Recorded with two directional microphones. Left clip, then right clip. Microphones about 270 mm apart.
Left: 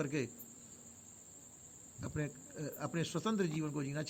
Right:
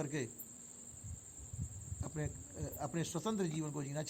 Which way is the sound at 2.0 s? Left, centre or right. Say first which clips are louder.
Left 3 dB; right.